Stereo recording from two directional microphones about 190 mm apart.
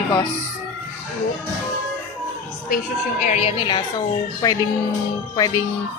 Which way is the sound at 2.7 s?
40° left (ahead or behind).